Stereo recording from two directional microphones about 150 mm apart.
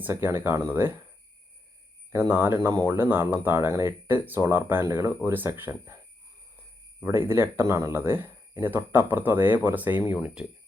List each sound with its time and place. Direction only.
0.0 s speech: 15° right (ahead or behind)
2.3 s speech: 15° right (ahead or behind)
7.0 s speech: 15° right (ahead or behind)